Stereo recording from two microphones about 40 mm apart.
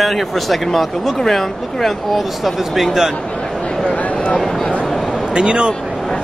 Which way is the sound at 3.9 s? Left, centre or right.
Left.